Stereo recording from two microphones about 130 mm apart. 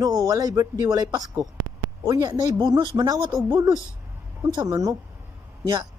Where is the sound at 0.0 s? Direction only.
30° right (ahead or behind).